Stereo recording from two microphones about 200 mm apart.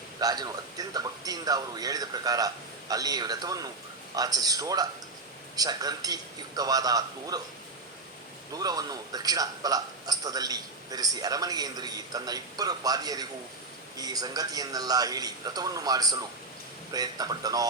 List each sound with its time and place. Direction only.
0.2 s a man's voice: 20° right (ahead or behind)
8.5 s a man's voice: 20° right (ahead or behind)